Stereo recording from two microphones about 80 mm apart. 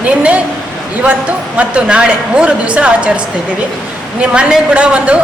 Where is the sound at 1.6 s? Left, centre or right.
Centre.